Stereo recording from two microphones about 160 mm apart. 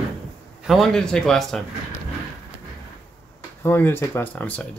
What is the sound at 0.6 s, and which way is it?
Speech, centre (ahead or behind).